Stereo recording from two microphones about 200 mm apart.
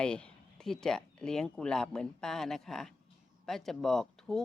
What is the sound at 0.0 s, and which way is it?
Speech, 5° left (ahead or behind).